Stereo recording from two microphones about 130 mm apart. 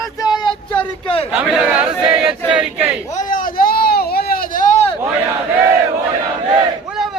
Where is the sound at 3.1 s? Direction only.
90° left.